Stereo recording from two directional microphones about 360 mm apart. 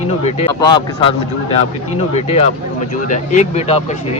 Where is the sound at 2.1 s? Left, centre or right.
Centre.